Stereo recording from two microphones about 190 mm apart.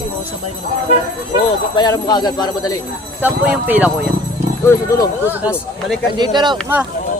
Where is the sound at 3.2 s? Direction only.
10° right (ahead or behind).